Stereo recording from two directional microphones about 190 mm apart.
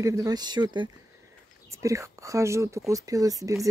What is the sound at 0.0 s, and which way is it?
Speech, 15° right (ahead or behind).